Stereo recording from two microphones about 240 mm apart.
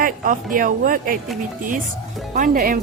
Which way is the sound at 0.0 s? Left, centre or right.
Right.